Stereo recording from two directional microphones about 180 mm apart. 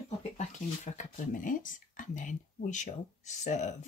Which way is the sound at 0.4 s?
40° left (ahead or behind).